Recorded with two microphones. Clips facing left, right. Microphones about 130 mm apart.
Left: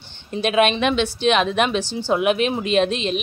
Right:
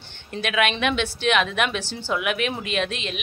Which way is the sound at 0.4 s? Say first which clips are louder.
Left 5 dB; 30° left (ahead or behind).